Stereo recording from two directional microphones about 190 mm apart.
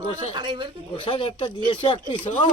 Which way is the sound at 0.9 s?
25° left (ahead or behind).